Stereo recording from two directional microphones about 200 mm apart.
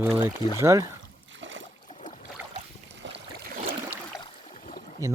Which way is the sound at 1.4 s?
70° right (ahead or behind).